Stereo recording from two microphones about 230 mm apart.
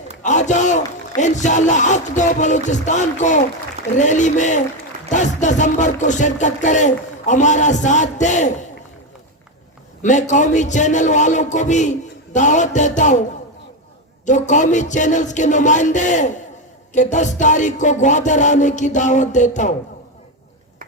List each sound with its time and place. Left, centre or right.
0.2 s a sound: left
1.1 s music: left
10.0 s music: left
14.3 s music: left